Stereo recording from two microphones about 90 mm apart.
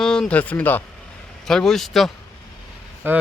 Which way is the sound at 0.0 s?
5° left (ahead or behind).